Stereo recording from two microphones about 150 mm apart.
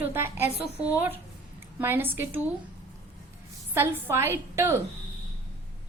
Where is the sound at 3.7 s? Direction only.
15° right (ahead or behind).